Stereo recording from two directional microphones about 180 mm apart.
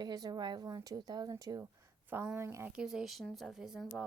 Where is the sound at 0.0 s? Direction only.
20° right (ahead or behind).